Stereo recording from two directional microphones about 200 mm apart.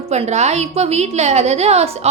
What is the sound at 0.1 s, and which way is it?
A woman's voice, 35° right (ahead or behind).